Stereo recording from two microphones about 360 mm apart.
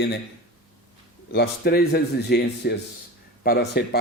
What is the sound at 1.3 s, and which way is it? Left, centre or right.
Speech, left.